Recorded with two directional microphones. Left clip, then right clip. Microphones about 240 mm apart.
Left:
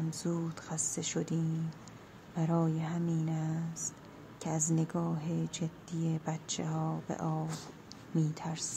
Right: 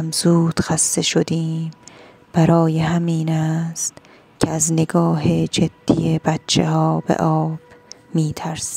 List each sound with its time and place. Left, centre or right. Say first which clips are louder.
0.1 s speech: right 19 dB; right